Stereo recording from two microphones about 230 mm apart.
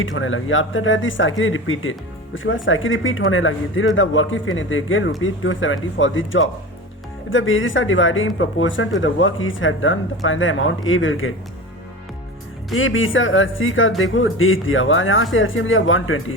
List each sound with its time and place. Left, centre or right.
0.0 s speech: left
12.7 s speech: left